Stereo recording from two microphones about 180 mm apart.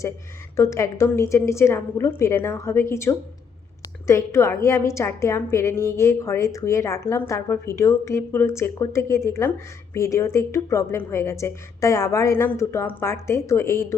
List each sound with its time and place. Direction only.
0.5 s a woman's voice: 15° left (ahead or behind)